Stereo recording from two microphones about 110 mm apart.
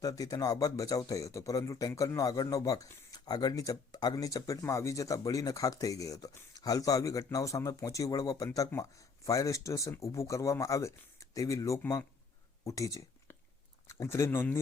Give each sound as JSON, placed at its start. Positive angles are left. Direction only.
{"t": 0.0, "sound": "speech", "side_deg": 35}